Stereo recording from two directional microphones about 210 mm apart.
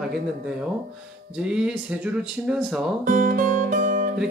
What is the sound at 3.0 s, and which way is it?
Music, 40° right (ahead or behind).